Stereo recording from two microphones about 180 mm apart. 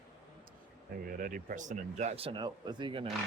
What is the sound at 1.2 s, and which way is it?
Speech, 50° right (ahead or behind).